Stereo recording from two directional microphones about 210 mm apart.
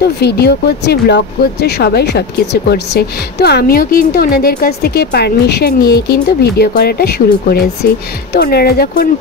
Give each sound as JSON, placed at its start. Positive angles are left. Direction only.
{"t": 0.2, "sound": "speech", "side_deg": 50}